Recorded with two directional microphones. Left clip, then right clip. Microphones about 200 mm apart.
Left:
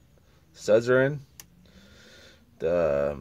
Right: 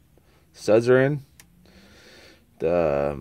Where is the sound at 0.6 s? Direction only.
45° right (ahead or behind).